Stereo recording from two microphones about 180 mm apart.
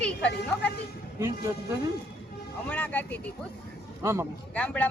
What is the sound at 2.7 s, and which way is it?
Speech, 10° left (ahead or behind).